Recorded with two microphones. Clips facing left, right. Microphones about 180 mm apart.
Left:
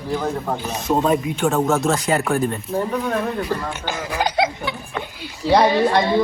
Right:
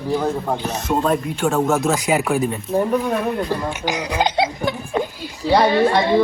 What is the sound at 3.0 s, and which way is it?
Speech, 15° right (ahead or behind).